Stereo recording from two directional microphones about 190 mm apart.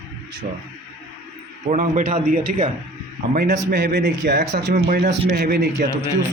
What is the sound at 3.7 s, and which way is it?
Speech, 60° right (ahead or behind).